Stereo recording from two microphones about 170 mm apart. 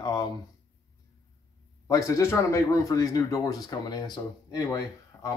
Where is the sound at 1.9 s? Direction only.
15° left (ahead or behind).